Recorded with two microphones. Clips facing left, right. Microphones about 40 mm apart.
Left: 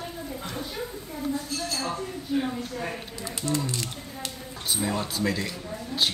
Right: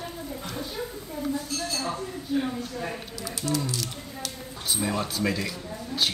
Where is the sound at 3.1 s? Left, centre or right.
Left.